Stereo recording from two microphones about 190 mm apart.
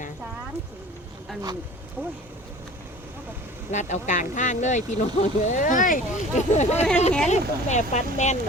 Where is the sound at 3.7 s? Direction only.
40° left (ahead or behind).